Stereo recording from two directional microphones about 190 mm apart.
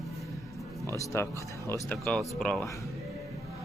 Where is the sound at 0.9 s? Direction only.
15° left (ahead or behind).